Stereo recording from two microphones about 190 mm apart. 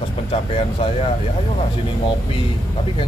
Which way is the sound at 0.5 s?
30° left (ahead or behind).